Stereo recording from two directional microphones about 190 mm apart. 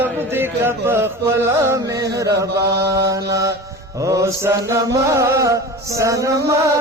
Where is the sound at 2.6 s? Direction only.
60° right (ahead or behind).